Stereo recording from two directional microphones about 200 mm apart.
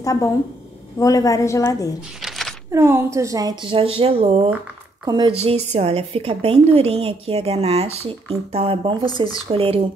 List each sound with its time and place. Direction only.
0.0 s a woman's voice: 15° left (ahead or behind)
2.2 s a sound: centre (ahead or behind)
2.7 s a woman's voice: 10° right (ahead or behind); by 9.8 s 30° right (ahead or behind)